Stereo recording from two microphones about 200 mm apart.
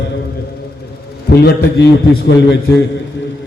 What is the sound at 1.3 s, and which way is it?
A man's voice, 55° left (ahead or behind).